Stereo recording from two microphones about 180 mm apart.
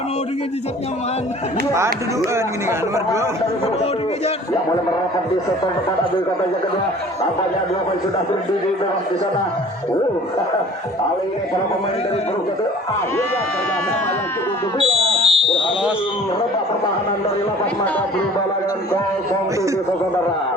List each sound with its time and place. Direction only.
2.3 s speech: 15° right (ahead or behind)
14.8 s fire alarm: 30° right (ahead or behind)